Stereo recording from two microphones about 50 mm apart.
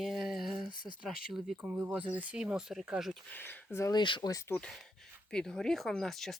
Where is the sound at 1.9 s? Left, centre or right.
Right.